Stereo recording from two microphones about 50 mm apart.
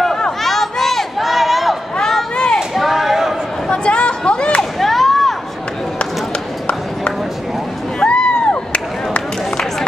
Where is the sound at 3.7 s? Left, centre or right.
Left.